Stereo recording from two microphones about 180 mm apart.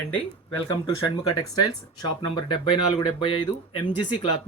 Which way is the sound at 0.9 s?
20° left (ahead or behind).